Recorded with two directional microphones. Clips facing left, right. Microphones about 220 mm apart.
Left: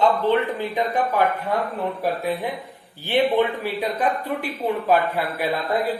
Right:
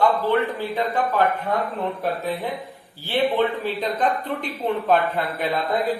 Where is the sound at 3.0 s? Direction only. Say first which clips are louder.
Left 2 dB; 15° left (ahead or behind).